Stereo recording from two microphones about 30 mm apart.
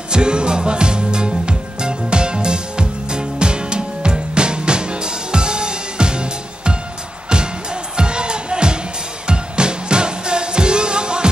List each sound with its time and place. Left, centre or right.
0.1 s music: right
7.9 s music: right